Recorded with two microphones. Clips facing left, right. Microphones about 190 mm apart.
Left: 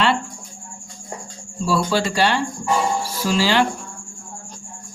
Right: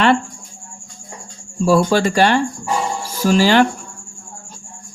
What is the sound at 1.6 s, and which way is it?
Speech, 50° right (ahead or behind).